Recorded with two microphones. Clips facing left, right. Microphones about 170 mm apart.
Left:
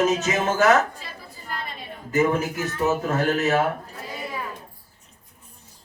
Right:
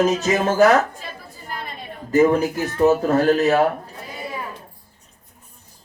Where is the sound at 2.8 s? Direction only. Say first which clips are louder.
Right 7 dB; 35° right (ahead or behind).